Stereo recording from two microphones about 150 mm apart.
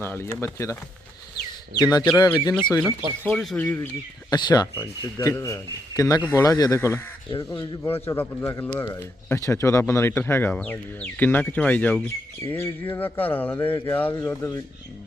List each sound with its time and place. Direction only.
0.0 s speech: 15° left (ahead or behind)
1.8 s speech: 25° left (ahead or behind)
3.3 s speech: centre (ahead or behind)
3.6 s speech: 15° left (ahead or behind)
4.3 s speech: 30° left (ahead or behind)
7.9 s speech: 15° left (ahead or behind)